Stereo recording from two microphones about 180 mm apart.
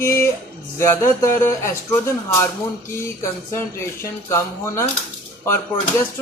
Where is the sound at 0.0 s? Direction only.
15° left (ahead or behind).